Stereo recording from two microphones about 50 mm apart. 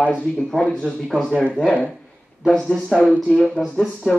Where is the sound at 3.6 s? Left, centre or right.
Left.